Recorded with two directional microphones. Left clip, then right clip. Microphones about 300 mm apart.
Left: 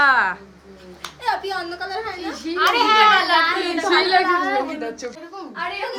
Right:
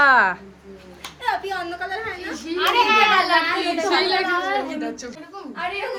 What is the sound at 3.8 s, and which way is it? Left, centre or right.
A woman's voice, left.